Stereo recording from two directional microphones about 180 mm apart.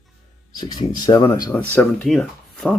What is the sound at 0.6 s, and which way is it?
Speech, 25° left (ahead or behind).